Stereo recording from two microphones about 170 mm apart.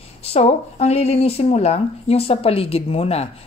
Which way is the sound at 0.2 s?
35° left (ahead or behind).